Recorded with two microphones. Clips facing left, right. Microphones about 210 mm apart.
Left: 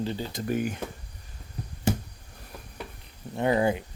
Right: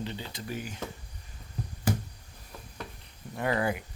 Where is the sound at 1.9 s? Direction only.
25° left (ahead or behind).